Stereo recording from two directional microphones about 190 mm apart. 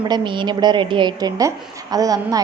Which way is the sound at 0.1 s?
25° right (ahead or behind).